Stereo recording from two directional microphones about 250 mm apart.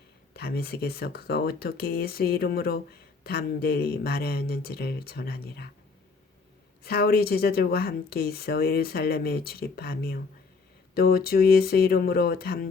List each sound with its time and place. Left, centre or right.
0.3 s speech: left
6.8 s speech: left